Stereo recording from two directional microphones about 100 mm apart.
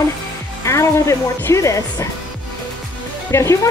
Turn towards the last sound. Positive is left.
turn(degrees=30)  # may be behind; listen again after turning